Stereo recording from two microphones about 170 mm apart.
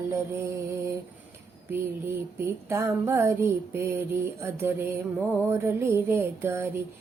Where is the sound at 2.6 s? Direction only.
15° right (ahead or behind).